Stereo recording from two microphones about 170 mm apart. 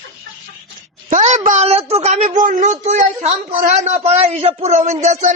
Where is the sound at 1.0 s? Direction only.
45° right (ahead or behind).